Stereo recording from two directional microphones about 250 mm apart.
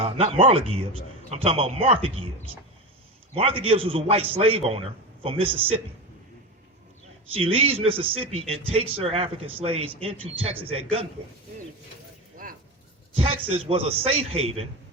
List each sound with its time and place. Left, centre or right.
0.0 s a man's voice: right
7.3 s a man's voice: right
13.1 s a man's voice: right